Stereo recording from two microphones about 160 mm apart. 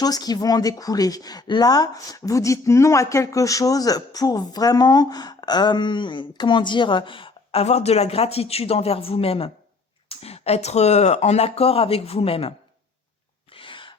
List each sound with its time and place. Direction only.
0.0 s speech: 25° left (ahead or behind)
13.5 s sneeze: 35° left (ahead or behind)